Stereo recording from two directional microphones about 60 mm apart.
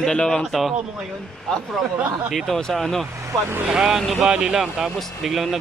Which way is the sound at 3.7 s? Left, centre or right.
Centre.